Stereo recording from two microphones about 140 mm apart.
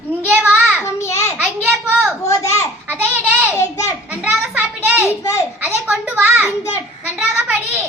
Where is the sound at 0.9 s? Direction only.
20° left (ahead or behind).